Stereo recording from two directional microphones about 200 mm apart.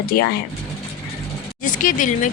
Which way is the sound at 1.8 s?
40° left (ahead or behind).